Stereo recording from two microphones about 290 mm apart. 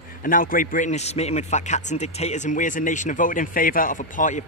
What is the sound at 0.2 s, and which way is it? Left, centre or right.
A man's voice, left.